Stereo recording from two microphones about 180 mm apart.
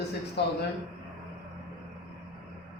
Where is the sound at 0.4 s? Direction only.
65° left (ahead or behind).